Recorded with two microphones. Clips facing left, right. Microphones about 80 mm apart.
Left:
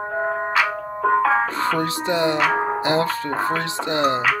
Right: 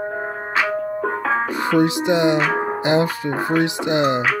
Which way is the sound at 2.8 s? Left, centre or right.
Centre.